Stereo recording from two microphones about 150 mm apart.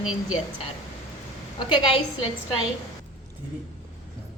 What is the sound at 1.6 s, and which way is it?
Speech, 30° left (ahead or behind).